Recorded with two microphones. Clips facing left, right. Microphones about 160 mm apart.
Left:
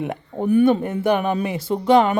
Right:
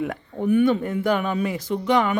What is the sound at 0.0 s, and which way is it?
Speech, 30° left (ahead or behind).